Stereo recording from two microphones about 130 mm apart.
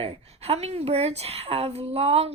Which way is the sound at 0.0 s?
50° right (ahead or behind).